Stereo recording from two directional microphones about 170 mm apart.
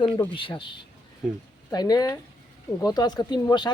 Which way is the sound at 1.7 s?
20° left (ahead or behind).